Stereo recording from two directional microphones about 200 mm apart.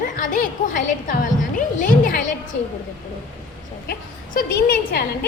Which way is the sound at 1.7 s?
40° left (ahead or behind).